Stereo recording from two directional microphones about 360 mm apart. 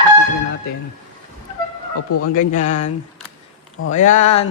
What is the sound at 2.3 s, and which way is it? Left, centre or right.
Speech, centre.